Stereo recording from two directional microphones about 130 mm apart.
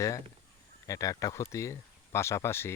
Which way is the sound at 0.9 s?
25° left (ahead or behind).